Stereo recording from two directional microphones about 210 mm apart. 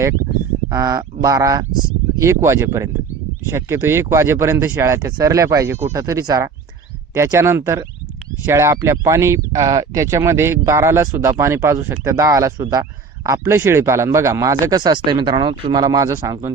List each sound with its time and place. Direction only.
0.7 s speech: 15° right (ahead or behind)